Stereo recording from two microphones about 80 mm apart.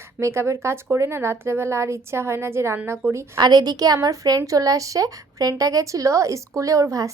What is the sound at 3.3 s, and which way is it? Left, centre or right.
A woman's voice, right.